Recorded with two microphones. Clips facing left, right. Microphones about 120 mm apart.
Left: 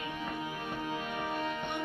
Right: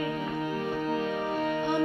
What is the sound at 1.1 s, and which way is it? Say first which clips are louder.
Music: right 6 dB; 35° right (ahead or behind).